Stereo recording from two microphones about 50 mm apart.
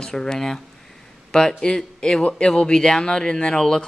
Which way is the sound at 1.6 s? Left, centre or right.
Centre.